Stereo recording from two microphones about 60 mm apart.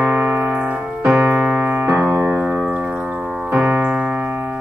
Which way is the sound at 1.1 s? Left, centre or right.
Right.